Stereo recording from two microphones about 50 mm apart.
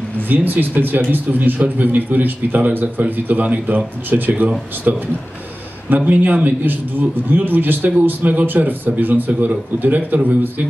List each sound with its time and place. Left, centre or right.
0.3 s a man's voice: right